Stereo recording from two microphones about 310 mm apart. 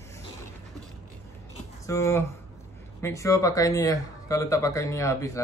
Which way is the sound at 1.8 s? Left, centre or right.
Centre.